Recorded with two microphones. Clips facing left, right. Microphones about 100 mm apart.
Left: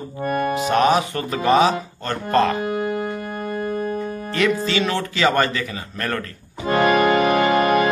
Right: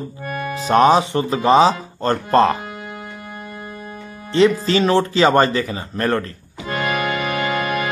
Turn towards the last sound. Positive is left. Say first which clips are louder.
# left 5 dB
turn(degrees=45)  # may be behind; listen again after turning